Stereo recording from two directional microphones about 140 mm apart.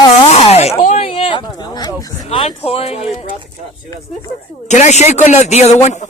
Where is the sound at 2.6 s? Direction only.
45° left (ahead or behind).